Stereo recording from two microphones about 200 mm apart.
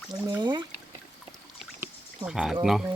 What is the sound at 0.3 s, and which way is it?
Speech, 20° right (ahead or behind).